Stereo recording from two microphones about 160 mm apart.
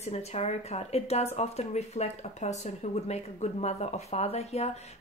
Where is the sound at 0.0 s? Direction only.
40° left (ahead or behind).